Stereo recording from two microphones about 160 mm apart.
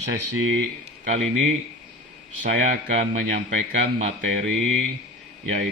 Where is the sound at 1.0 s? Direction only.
50° right (ahead or behind).